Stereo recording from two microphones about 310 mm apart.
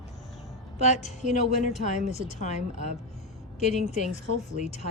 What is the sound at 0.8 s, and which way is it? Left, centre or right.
A woman's voice, left.